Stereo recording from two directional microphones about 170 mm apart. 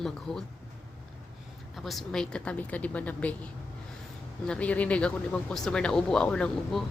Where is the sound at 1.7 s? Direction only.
Centre (ahead or behind).